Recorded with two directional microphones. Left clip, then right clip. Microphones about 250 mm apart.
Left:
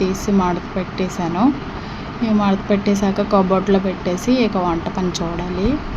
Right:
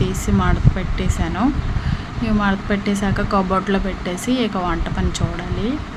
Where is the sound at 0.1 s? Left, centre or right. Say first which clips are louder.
Left 3 dB; centre.